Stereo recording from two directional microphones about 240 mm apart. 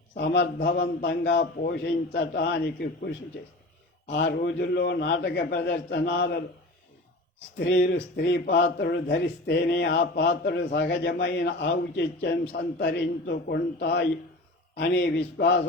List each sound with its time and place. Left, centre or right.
0.2 s a man's voice: left
4.1 s a man's voice: left
7.6 s a man's voice: left